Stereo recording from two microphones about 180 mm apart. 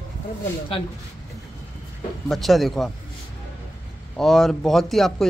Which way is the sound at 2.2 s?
Centre (ahead or behind).